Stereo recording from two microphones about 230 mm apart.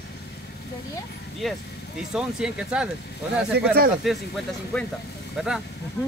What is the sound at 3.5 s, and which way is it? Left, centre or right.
Speech, right.